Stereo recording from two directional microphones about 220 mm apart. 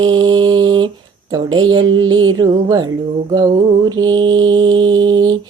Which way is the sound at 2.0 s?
20° right (ahead or behind).